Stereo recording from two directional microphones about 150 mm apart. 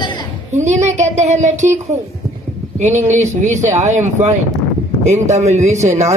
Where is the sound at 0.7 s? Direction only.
50° right (ahead or behind).